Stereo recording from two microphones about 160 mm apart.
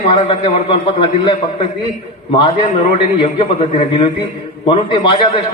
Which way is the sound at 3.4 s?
40° left (ahead or behind).